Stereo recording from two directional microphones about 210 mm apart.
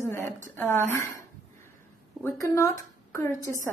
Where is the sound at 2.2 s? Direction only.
15° left (ahead or behind).